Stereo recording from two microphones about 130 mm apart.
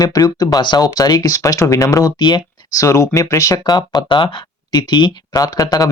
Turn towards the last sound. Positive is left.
turn(degrees=30)  # may be behind; listen again after turning